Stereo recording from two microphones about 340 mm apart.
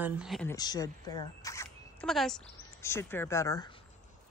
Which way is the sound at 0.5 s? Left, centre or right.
Centre.